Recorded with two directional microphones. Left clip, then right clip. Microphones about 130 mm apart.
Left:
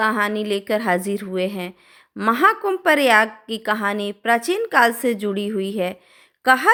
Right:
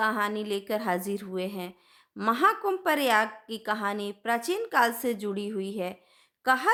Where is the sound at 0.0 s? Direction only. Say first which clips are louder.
Left 7 dB; 25° left (ahead or behind).